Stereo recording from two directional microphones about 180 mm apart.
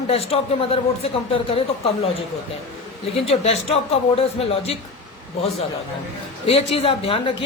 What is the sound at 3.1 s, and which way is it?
A man's voice, 35° left (ahead or behind).